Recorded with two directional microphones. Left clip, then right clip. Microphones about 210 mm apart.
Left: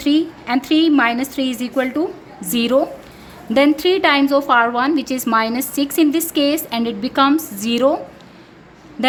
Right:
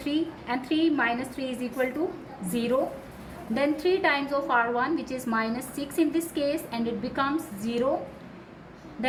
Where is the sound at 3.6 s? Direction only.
50° left (ahead or behind).